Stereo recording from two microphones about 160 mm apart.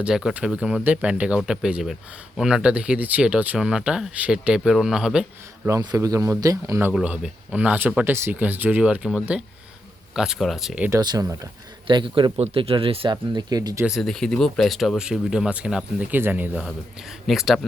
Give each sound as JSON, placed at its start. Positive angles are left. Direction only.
{"t": 0.0, "sound": "speech", "side_deg": -5}
{"t": 5.6, "sound": "speech", "side_deg": -20}
{"t": 6.9, "sound": "speech", "side_deg": -5}
{"t": 10.8, "sound": "speech", "side_deg": -25}
{"t": 13.8, "sound": "speech", "side_deg": 0}